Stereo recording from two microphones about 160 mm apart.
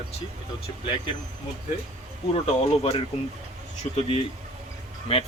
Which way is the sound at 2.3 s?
35° left (ahead or behind).